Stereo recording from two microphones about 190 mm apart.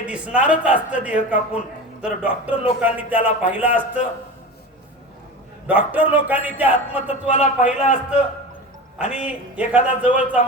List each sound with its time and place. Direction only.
0.0 s speech: 5° right (ahead or behind)
5.6 s speech: 10° right (ahead or behind)
7.3 s a man's voice: 40° left (ahead or behind)
9.0 s speech: 5° right (ahead or behind)